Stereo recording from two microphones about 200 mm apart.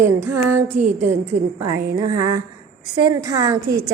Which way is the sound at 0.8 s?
35° right (ahead or behind).